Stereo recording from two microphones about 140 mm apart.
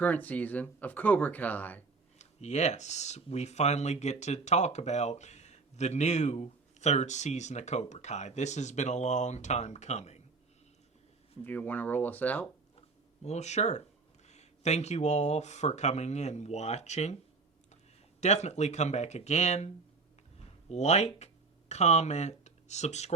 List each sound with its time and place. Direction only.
0.0 s speech: 10° left (ahead or behind)
2.1 s speech: 55° left (ahead or behind)
11.4 s speech: 10° left (ahead or behind)
13.2 s speech: 55° left (ahead or behind)
18.2 s speech: 55° left (ahead or behind)